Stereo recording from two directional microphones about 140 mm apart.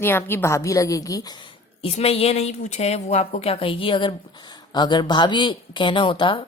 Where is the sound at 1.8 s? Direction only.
45° left (ahead or behind).